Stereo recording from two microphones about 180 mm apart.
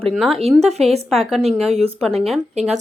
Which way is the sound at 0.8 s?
35° right (ahead or behind).